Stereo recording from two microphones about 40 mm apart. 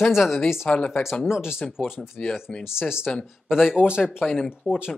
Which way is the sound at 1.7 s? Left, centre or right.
Centre.